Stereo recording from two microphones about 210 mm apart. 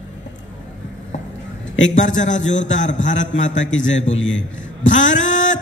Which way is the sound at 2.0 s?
35° left (ahead or behind).